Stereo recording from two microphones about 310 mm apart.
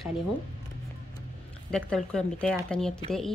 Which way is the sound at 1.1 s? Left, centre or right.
Centre.